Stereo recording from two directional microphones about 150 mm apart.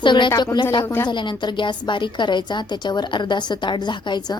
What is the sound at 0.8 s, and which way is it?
Speech, 15° left (ahead or behind).